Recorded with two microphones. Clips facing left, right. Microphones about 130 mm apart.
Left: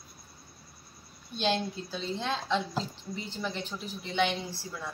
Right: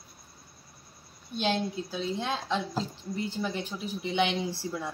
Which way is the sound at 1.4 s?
5° right (ahead or behind).